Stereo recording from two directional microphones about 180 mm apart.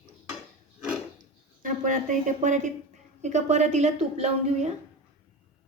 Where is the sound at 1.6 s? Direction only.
45° right (ahead or behind).